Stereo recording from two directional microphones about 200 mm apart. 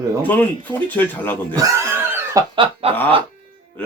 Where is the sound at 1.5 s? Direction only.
15° right (ahead or behind).